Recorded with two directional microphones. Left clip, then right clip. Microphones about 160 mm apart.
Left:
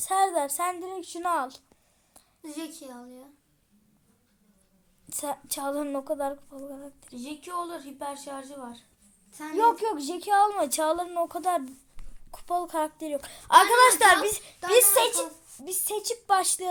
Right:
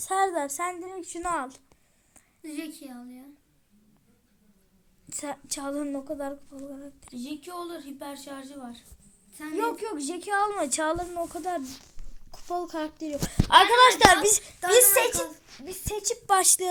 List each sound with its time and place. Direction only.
0.0 s speech: centre (ahead or behind)
2.4 s a woman's voice: 35° left (ahead or behind)
5.0 s speech: centre (ahead or behind)
7.2 s a woman's voice: 25° left (ahead or behind)
9.6 s speech: 10° left (ahead or behind)
13.5 s a woman's voice: 20° left (ahead or behind)
16.2 s a woman's voice: 10° right (ahead or behind)